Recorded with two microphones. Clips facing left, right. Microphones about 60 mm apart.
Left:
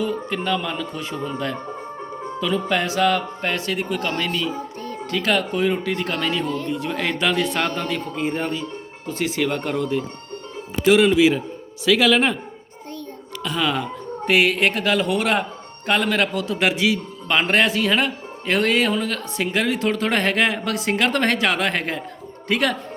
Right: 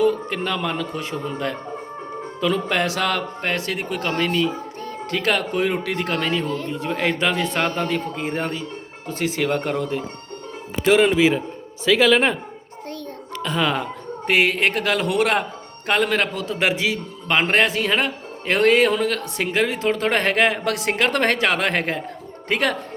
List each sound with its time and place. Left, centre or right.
0.0 s speech: right
4.0 s a man's voice: right
13.4 s a man's voice: right
15.9 s a man's voice: right